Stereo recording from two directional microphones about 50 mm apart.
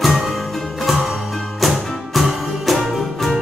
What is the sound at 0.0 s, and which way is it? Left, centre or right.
Music, centre.